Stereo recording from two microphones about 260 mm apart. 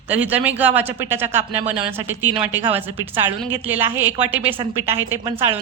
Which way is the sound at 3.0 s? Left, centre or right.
Centre.